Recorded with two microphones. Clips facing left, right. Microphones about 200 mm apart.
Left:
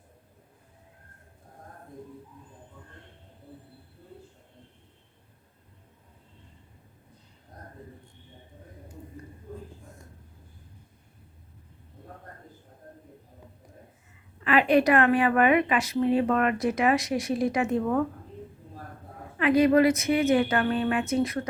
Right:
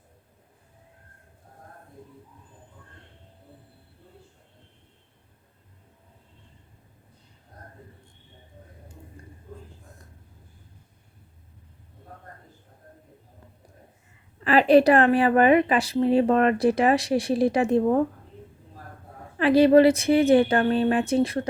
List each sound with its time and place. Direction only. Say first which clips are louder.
14.4 s a woman's voice: right 5 dB; 35° right (ahead or behind)
19.4 s a woman's voice: right 4 dB; 30° right (ahead or behind)